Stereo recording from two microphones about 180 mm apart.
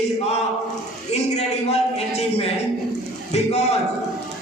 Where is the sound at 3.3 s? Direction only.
35° left (ahead or behind).